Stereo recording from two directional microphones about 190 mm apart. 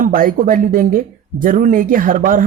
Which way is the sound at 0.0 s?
45° right (ahead or behind).